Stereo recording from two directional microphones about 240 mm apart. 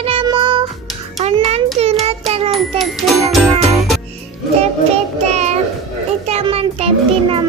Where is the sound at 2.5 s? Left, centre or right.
Centre.